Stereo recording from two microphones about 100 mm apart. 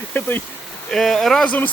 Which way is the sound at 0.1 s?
20° left (ahead or behind).